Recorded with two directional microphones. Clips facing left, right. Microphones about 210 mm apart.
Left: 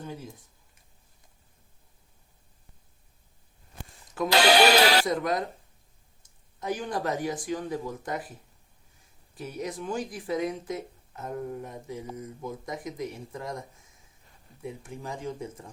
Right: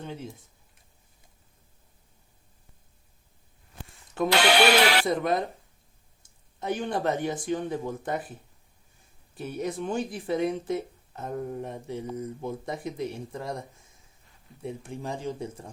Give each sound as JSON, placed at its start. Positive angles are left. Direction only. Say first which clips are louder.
{"t": 0.0, "sound": "speech", "louder": "right 1 dB", "side_deg": -25}
{"t": 4.3, "sound": "speech", "louder": "left 1 dB", "side_deg": 40}
{"t": 5.0, "sound": "speech", "louder": "right 2 dB", "side_deg": -25}
{"t": 6.6, "sound": "speech", "louder": "right 2 dB", "side_deg": -25}
{"t": 9.4, "sound": "speech", "louder": "right 3 dB", "side_deg": -30}